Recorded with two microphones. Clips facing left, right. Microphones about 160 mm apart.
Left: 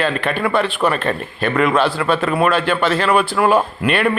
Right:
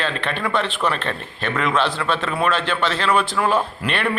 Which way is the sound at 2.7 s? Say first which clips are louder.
Left 4 dB; 50° left (ahead or behind).